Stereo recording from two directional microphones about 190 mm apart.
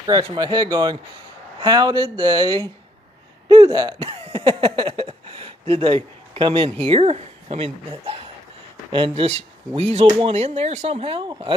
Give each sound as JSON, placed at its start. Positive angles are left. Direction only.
{"t": 0.0, "sound": "speech", "side_deg": -20}